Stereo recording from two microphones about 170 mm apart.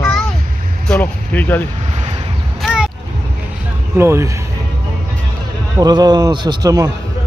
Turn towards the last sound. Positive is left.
turn(degrees=-20)  # may be behind; listen again after turning